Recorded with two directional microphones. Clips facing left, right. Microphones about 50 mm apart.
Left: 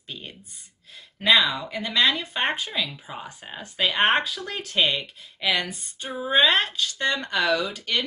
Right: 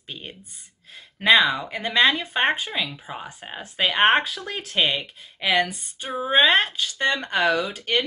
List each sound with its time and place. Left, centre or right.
1.2 s speech: right
5.5 s speech: right